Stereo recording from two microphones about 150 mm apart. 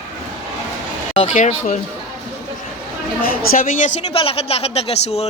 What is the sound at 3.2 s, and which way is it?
Speech, 70° left (ahead or behind).